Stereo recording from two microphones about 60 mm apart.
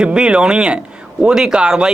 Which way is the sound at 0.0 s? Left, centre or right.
Centre.